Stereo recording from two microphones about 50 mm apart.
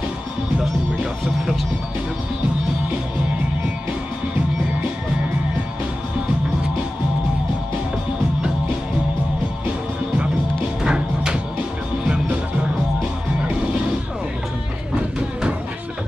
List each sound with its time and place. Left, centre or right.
1.2 s speech: centre
10.8 s music: centre